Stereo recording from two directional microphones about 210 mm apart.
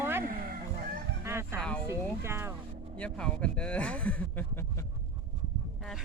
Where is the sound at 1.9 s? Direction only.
10° right (ahead or behind).